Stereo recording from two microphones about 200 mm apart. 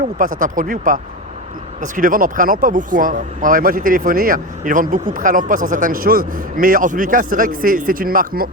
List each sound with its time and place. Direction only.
0.2 s speech: 40° right (ahead or behind)